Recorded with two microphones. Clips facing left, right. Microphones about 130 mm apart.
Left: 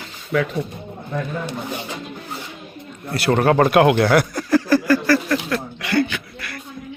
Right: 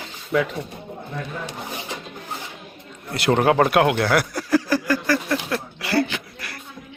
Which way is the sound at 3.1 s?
20° right (ahead or behind).